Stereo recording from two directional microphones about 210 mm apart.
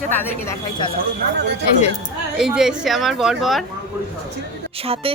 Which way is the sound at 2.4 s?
5° right (ahead or behind).